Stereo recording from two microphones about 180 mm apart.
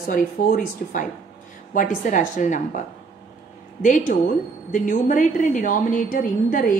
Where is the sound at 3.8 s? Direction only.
45° left (ahead or behind).